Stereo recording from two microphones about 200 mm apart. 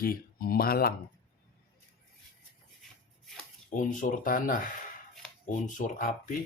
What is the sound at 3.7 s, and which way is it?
Speech, 40° left (ahead or behind).